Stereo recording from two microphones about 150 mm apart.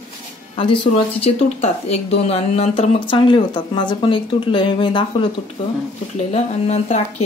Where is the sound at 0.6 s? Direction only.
35° left (ahead or behind).